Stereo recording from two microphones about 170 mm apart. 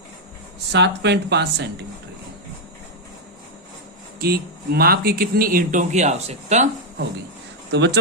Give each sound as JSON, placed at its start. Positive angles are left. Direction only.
{"t": 0.7, "sound": "speech", "side_deg": -90}
{"t": 4.2, "sound": "speech", "side_deg": -65}
{"t": 7.7, "sound": "speech", "side_deg": -90}